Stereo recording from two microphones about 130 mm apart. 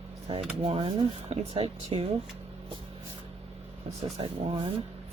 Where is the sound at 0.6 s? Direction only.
45° right (ahead or behind).